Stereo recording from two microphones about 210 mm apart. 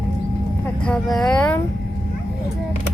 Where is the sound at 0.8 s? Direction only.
5° left (ahead or behind).